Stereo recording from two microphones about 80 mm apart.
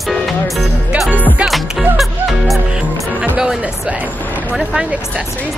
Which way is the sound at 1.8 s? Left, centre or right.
Centre.